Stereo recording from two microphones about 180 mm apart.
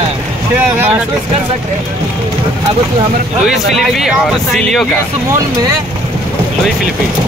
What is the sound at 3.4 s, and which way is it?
Speech, centre (ahead or behind).